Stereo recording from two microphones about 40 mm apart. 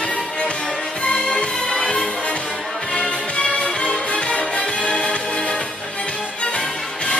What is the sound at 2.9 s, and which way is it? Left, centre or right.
Music, left.